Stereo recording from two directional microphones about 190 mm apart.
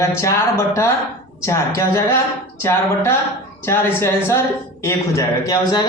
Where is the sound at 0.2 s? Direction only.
15° left (ahead or behind).